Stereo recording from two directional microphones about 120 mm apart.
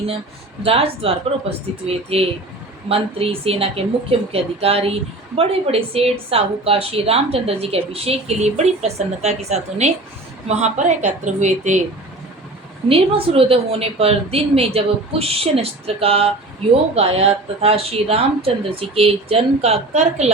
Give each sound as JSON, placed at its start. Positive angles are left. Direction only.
{"t": 0.6, "sound": "a woman's voice", "side_deg": -55}
{"t": 12.9, "sound": "speech", "side_deg": -50}